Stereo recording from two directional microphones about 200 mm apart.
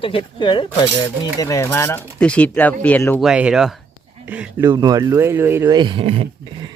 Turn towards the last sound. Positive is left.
turn(degrees=-25)  # may be behind; listen again after turning